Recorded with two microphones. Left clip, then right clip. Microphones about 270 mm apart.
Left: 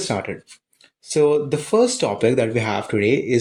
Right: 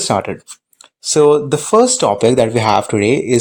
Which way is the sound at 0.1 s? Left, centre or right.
Right.